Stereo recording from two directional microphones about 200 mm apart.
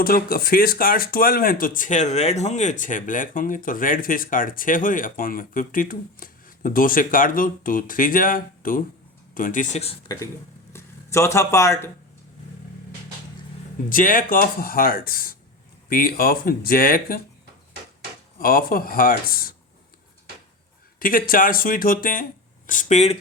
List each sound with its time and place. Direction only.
0.0 s speech: 50° left (ahead or behind); by 11.9 s 15° left (ahead or behind)
13.9 s speech: 45° left (ahead or behind)
18.3 s speech: 45° left (ahead or behind)
21.0 s speech: 45° left (ahead or behind)